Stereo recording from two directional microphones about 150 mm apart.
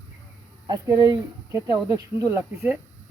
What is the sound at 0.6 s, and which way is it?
Speech, 25° right (ahead or behind).